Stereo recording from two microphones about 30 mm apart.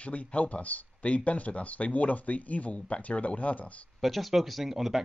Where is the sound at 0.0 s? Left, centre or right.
Left.